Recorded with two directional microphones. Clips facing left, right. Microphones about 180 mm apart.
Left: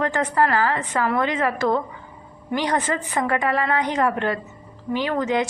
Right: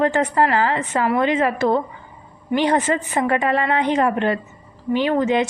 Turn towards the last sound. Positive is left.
turn(degrees=-20)  # may be behind; listen again after turning